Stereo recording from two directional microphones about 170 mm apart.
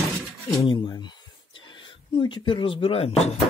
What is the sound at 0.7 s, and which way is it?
Speech, 25° left (ahead or behind).